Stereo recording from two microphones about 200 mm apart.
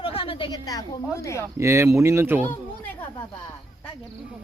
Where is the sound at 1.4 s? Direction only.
15° right (ahead or behind).